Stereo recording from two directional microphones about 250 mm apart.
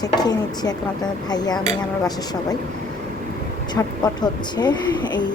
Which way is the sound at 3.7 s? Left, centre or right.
Centre.